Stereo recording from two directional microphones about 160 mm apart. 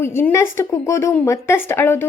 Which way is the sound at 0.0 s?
15° left (ahead or behind).